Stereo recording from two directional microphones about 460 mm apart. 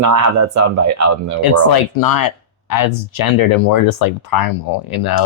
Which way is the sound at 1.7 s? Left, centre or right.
Left.